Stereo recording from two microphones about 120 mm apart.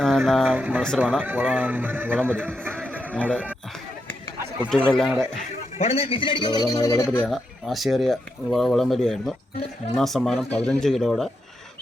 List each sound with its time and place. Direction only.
0.0 s speech: centre (ahead or behind)
0.5 s a man's voice: 10° right (ahead or behind)
2.8 s a sound: 15° right (ahead or behind)
3.1 s speech: 10° left (ahead or behind)
4.7 s speech: 5° left (ahead or behind)
5.8 s a man's voice: 55° left (ahead or behind); by 7.3 s 20° left (ahead or behind)
7.3 s speech: centre (ahead or behind)